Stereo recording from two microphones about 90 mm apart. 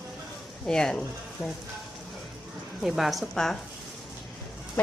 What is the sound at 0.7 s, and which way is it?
Speech, 5° left (ahead or behind).